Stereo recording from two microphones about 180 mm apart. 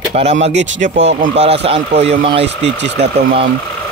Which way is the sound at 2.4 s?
80° right.